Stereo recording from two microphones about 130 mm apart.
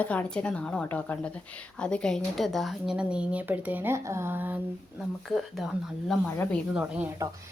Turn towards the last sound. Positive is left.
turn(degrees=-10)  # may be behind; listen again after turning